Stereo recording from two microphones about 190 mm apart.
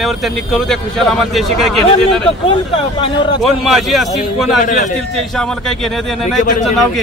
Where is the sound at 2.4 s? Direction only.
30° left (ahead or behind).